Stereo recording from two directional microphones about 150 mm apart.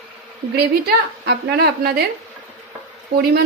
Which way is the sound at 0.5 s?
90° right.